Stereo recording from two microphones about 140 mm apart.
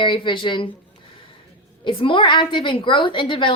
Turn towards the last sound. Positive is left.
turn(degrees=35)  # may be behind; listen again after turning